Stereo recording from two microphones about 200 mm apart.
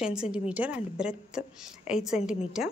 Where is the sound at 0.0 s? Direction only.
5° right (ahead or behind).